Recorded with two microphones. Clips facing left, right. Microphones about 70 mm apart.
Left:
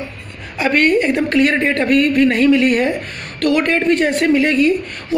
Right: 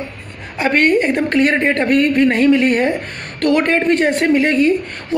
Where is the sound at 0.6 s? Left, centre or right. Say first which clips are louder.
Even; right.